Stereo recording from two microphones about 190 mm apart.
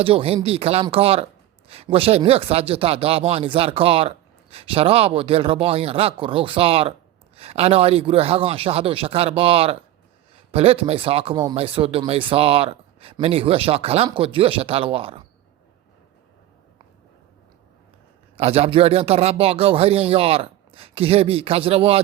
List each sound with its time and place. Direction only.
0.0 s speech: 30° right (ahead or behind)
18.3 s speech: 30° right (ahead or behind)